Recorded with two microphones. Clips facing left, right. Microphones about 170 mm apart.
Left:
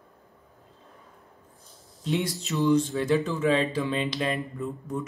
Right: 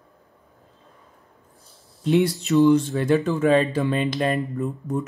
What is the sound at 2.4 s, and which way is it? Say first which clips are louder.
Speech: right 5 dB; 65° right (ahead or behind).